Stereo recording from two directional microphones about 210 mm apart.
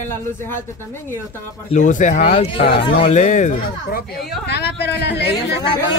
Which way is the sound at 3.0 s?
35° left (ahead or behind).